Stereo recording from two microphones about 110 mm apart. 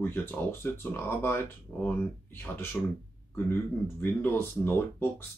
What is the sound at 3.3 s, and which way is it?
Speech, 20° left (ahead or behind).